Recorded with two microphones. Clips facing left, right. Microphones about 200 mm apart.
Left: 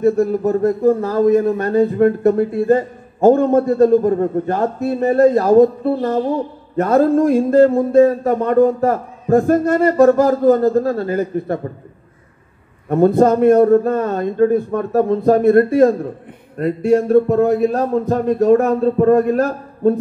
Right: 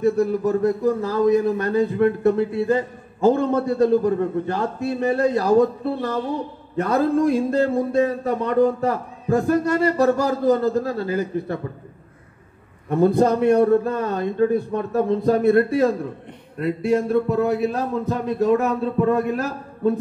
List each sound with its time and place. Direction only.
0.0 s speech: 50° left (ahead or behind)
12.9 s speech: 50° left (ahead or behind)